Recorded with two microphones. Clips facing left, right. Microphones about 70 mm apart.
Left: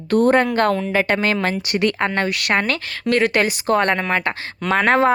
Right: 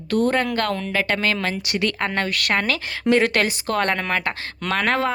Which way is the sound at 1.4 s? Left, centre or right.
Left.